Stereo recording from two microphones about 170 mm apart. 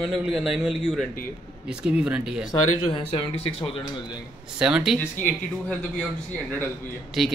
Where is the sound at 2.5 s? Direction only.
30° left (ahead or behind).